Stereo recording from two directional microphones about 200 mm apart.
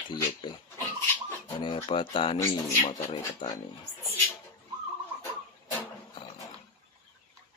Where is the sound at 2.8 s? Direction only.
25° left (ahead or behind).